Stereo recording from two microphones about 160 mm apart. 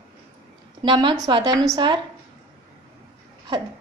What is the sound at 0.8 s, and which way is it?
A woman's voice, 30° right (ahead or behind).